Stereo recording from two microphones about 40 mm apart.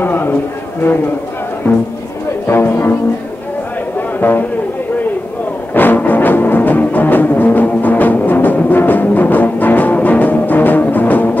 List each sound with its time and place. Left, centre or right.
0.0 s a sound: left
2.4 s speech: left
4.2 s speech: left
5.8 s music: left